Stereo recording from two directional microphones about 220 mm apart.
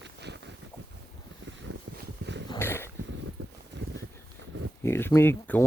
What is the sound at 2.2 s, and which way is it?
Dog, 45° right (ahead or behind).